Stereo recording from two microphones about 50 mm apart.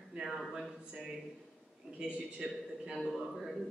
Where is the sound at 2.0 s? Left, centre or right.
Centre.